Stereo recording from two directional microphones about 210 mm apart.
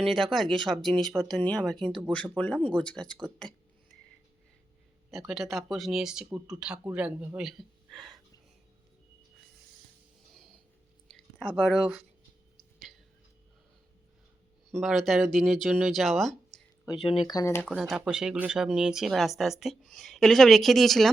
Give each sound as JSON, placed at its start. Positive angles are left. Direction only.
{"t": 0.0, "sound": "speech", "side_deg": 0}
{"t": 5.1, "sound": "speech", "side_deg": 0}
{"t": 11.1, "sound": "speech", "side_deg": 0}
{"t": 12.5, "sound": "a sound", "side_deg": 0}
{"t": 14.7, "sound": "speech", "side_deg": 0}
{"t": 16.8, "sound": "speech", "side_deg": 20}
{"t": 17.7, "sound": "speech", "side_deg": 0}